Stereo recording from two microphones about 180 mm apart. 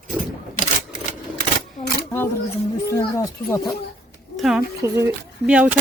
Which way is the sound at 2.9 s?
20° left (ahead or behind).